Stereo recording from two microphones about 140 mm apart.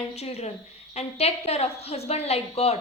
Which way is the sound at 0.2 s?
50° left (ahead or behind).